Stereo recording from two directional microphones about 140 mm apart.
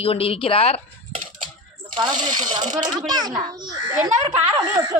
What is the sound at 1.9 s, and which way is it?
A child's voice, 30° right (ahead or behind).